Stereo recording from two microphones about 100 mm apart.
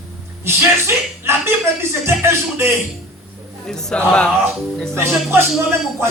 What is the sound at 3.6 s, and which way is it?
A man's voice, 5° left (ahead or behind).